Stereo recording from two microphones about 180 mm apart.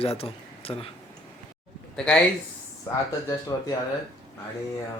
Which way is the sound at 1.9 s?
5° left (ahead or behind).